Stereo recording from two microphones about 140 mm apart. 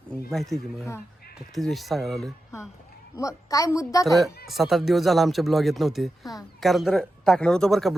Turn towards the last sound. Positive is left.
turn(degrees=0)  # may be behind; listen again after turning